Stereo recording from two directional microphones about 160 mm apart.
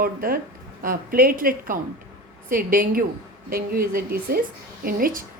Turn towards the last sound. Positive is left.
turn(degrees=-60)  # may be behind; listen again after turning